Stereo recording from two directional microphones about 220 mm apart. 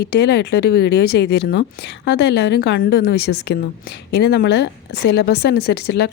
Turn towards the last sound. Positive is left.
turn(degrees=45)  # may be behind; listen again after turning